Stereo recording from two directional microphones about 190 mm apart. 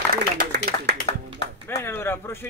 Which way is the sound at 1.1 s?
30° left (ahead or behind).